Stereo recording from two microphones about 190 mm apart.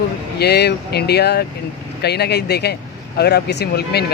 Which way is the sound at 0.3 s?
60° left (ahead or behind).